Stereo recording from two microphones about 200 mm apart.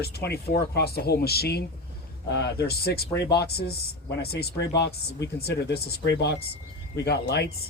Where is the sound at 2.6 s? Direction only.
50° left (ahead or behind).